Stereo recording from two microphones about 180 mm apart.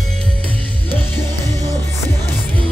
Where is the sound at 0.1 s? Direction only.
5° left (ahead or behind).